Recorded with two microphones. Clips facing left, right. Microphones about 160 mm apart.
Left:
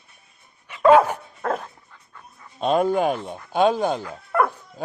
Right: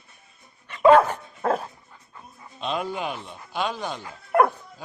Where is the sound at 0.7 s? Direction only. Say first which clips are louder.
Left 1 dB; 5° left (ahead or behind).